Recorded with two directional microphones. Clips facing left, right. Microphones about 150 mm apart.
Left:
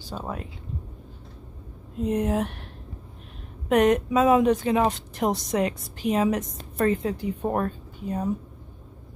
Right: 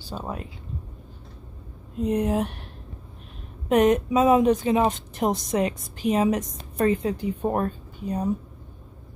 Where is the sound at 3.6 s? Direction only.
20° right (ahead or behind).